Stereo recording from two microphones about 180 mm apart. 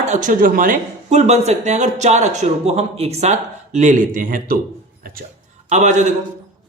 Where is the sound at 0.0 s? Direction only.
40° right (ahead or behind).